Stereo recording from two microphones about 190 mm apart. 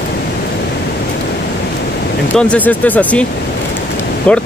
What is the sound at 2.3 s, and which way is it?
Speech, 10° left (ahead or behind).